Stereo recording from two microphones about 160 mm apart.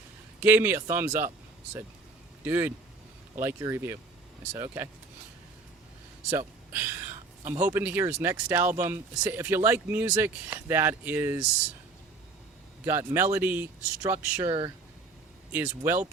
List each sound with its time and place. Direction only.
0.3 s speech: 15° right (ahead or behind)
2.4 s speech: 10° right (ahead or behind)
6.7 s speech: 10° right (ahead or behind)
12.8 s speech: 15° right (ahead or behind)
15.5 s speech: 15° right (ahead or behind)